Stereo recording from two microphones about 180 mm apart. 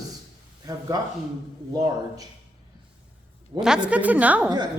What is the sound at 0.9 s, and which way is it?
Speech, 20° right (ahead or behind).